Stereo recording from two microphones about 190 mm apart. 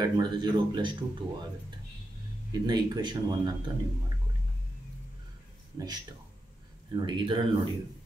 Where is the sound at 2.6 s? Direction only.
20° right (ahead or behind).